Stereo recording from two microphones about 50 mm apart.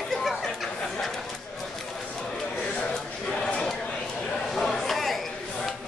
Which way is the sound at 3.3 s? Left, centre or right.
Centre.